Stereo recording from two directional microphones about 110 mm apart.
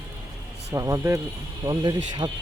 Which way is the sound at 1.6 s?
40° right (ahead or behind).